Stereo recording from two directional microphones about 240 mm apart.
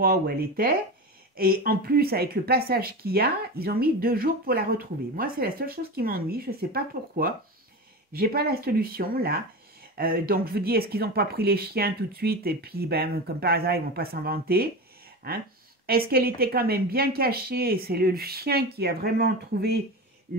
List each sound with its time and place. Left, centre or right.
0.0 s speech: right